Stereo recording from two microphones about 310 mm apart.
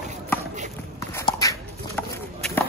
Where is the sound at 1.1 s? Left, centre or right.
Centre.